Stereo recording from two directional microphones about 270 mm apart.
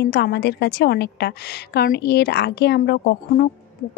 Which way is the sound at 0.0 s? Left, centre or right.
Left.